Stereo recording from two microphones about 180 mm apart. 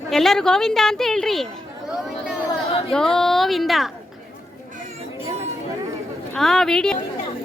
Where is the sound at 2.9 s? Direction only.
5° left (ahead or behind).